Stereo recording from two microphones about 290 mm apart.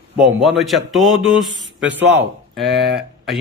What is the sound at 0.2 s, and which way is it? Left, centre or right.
Speech, centre.